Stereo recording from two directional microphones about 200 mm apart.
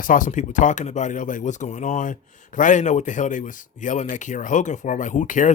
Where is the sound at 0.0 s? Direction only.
40° left (ahead or behind).